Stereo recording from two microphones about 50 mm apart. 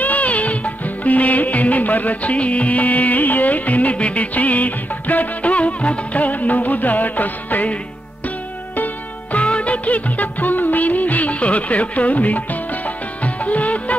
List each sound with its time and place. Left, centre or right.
0.0 s music: left
8.7 s music of bollywood: left